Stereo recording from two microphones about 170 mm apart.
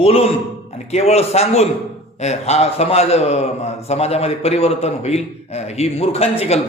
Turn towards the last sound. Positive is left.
turn(degrees=40)  # may be behind; listen again after turning